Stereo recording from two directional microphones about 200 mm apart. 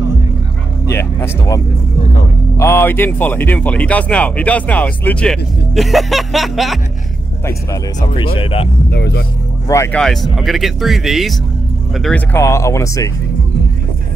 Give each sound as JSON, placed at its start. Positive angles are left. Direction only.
{"t": 0.8, "sound": "speech", "side_deg": 15}
{"t": 8.4, "sound": "speech", "side_deg": 30}
{"t": 8.9, "sound": "speech", "side_deg": 55}
{"t": 9.7, "sound": "speech", "side_deg": 15}
{"t": 9.9, "sound": "speech", "side_deg": 0}